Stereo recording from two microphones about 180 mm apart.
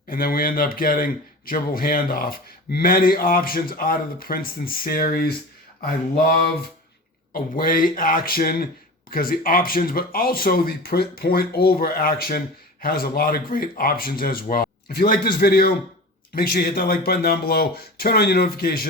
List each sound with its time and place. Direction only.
0.1 s speech: 55° left (ahead or behind)
7.3 s speech: 50° left (ahead or behind)